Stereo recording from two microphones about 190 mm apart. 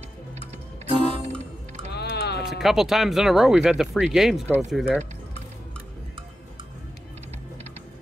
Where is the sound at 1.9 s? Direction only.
60° left (ahead or behind).